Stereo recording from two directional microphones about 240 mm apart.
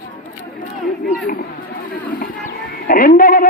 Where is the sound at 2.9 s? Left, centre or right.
Left.